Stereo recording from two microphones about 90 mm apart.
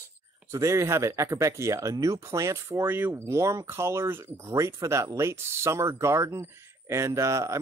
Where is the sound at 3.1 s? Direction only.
35° right (ahead or behind).